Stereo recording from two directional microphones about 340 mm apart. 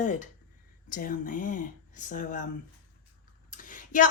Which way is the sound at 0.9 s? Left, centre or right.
Left.